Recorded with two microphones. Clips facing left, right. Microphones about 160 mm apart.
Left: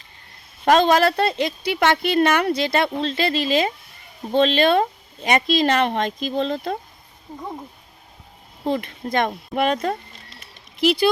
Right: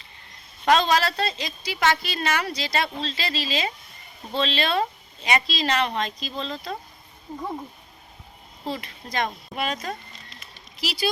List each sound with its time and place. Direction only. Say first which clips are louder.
0.6 s a woman's voice: left 5 dB; 50° left (ahead or behind)
8.6 s a woman's voice: left 8 dB; 55° left (ahead or behind)